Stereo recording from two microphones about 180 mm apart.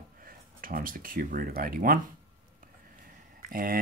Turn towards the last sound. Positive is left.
turn(degrees=-50)  # may be behind; listen again after turning